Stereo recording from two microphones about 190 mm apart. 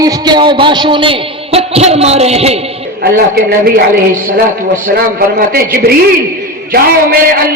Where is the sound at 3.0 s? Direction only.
50° right (ahead or behind).